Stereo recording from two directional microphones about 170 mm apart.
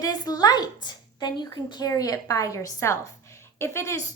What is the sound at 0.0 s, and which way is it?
A woman's voice, 25° left (ahead or behind).